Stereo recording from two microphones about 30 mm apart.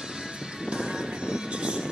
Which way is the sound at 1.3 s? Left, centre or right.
Right.